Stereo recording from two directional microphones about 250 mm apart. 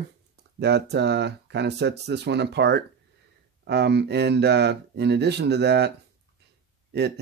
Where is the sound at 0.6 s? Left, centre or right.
Right.